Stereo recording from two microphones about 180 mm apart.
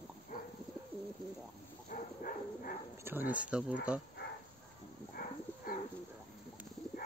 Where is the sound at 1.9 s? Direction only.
50° left (ahead or behind).